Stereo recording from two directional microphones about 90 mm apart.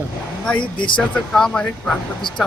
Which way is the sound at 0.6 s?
65° left (ahead or behind).